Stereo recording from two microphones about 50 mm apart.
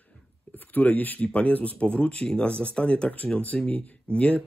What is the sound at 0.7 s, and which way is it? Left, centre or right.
Speech, left.